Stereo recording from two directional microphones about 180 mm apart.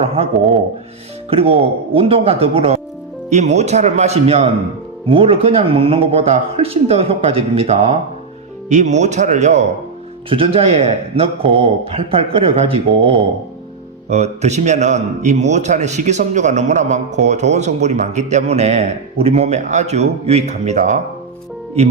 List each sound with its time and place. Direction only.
1.3 s a man's voice: 30° right (ahead or behind)